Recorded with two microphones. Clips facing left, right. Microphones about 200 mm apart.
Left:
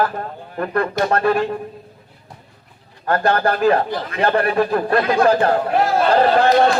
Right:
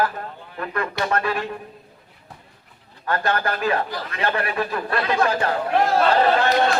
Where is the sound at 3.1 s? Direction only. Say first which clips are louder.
Left 6 dB; 35° left (ahead or behind).